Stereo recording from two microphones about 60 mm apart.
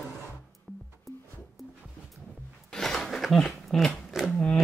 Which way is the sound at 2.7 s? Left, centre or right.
Centre.